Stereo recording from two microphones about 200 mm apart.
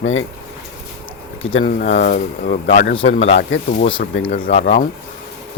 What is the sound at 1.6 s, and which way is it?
Speech, 45° left (ahead or behind).